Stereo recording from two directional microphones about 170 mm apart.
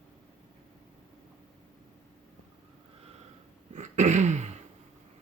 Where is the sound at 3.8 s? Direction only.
45° right (ahead or behind).